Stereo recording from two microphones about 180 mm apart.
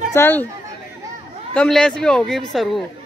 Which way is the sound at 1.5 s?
5° left (ahead or behind).